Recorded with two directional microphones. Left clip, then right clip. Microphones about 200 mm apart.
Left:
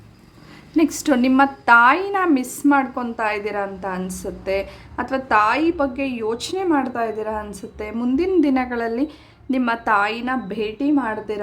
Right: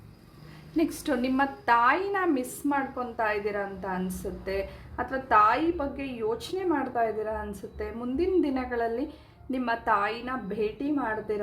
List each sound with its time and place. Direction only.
0.8 s a woman's voice: 30° left (ahead or behind)